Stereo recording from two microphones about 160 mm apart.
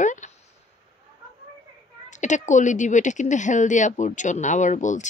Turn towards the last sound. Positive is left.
turn(degrees=50)  # may be behind; listen again after turning